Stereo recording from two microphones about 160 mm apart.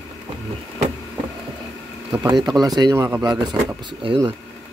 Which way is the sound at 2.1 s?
25° right (ahead or behind).